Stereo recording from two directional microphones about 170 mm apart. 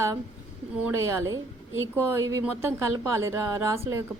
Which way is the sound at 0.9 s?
15° right (ahead or behind).